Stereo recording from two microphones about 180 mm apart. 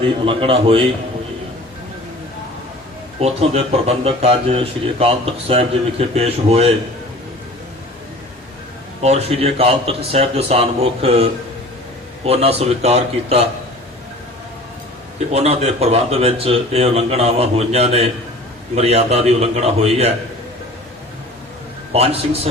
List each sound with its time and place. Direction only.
0.0 s speech: 30° right (ahead or behind)
3.2 s speech: 35° right (ahead or behind)
9.0 s speech: 35° right (ahead or behind)
15.3 s speech: 35° right (ahead or behind)
21.9 s speech: 35° right (ahead or behind)